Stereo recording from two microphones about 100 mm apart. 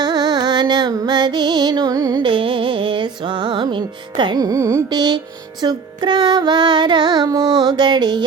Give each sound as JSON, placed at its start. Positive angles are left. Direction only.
{"t": 0.0, "sound": "music", "side_deg": -45}
{"t": 2.2, "sound": "music", "side_deg": -55}